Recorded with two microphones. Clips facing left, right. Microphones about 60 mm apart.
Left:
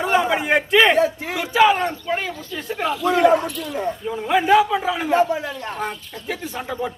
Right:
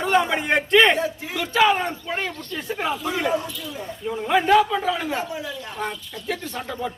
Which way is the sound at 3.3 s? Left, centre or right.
Left.